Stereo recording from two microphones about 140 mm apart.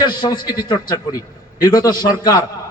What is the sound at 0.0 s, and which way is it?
A man's voice, 30° left (ahead or behind).